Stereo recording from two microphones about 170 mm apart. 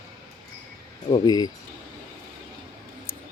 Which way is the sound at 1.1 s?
25° left (ahead or behind).